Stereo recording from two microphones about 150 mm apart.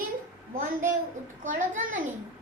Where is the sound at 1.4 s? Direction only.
60° right (ahead or behind).